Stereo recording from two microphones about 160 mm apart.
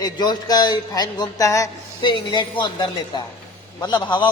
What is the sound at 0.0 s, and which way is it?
A woman's voice, 25° left (ahead or behind).